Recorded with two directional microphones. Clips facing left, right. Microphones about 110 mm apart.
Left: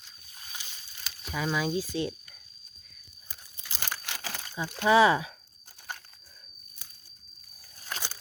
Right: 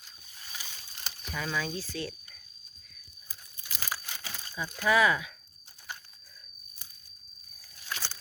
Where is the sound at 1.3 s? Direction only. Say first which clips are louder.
Left 4 dB; 10° left (ahead or behind).